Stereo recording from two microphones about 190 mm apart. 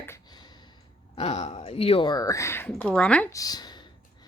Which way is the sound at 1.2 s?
35° left (ahead or behind).